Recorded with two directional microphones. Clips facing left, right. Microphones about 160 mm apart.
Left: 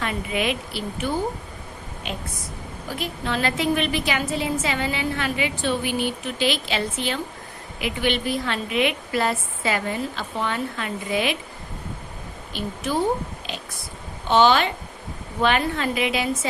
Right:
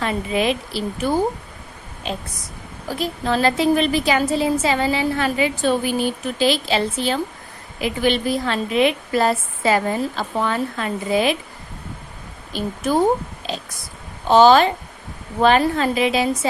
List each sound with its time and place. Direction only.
0.0 s a woman's voice: 30° right (ahead or behind)
12.5 s a woman's voice: 45° right (ahead or behind)